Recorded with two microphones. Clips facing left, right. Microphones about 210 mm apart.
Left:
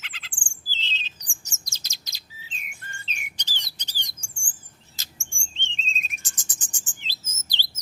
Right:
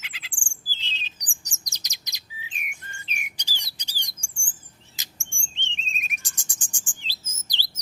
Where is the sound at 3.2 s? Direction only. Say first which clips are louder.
Right 1 dB; 10° right (ahead or behind).